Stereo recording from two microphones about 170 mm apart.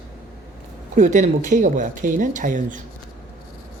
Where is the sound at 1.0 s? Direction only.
45° right (ahead or behind).